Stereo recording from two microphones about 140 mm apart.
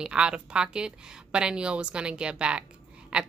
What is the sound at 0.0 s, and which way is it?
A woman's voice, 5° right (ahead or behind).